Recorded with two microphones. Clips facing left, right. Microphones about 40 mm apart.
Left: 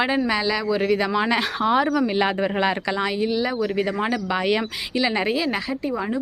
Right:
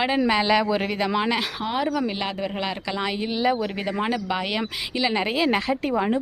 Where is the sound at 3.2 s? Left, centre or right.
Centre.